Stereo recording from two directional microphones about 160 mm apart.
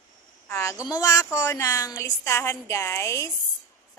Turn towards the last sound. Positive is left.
turn(degrees=20)  # may be behind; listen again after turning